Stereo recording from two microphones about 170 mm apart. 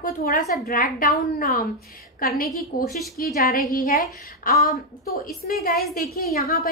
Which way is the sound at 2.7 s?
60° left (ahead or behind).